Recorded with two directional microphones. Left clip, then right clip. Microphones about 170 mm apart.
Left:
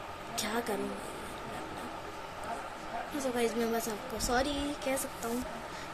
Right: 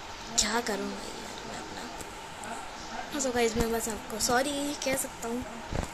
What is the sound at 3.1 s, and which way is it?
A woman's voice, 5° right (ahead or behind).